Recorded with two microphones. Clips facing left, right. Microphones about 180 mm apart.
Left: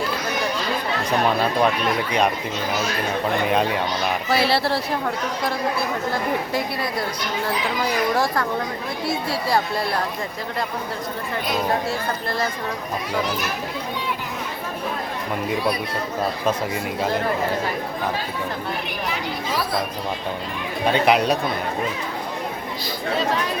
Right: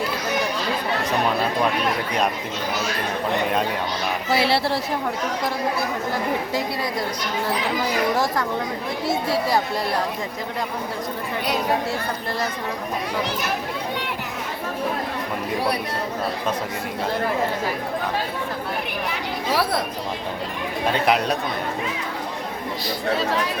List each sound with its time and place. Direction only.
4.3 s speech: 20° right (ahead or behind)
20.9 s speech: centre (ahead or behind)